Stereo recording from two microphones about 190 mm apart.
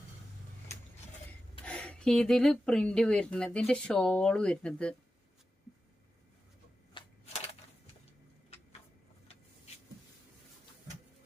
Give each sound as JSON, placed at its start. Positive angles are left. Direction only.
{"t": 1.6, "sound": "speech", "side_deg": 5}